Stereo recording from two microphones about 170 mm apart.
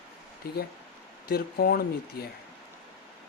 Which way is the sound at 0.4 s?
65° left (ahead or behind).